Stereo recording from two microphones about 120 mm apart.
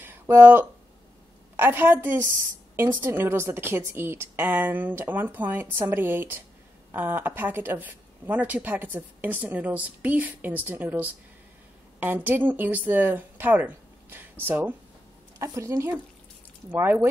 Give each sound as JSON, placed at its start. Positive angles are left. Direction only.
{"t": 0.4, "sound": "a woman's voice", "side_deg": -15}